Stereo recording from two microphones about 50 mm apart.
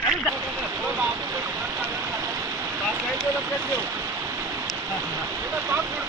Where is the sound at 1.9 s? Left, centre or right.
Right.